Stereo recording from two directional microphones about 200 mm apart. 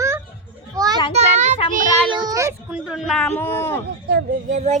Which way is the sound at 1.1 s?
35° right (ahead or behind).